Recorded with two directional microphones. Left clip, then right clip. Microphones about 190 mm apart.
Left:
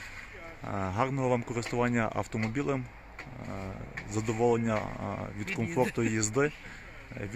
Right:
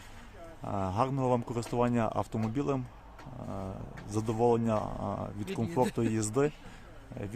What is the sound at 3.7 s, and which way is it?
Speech, 10° right (ahead or behind).